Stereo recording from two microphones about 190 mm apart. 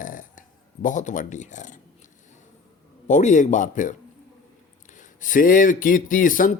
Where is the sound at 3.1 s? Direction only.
40° left (ahead or behind).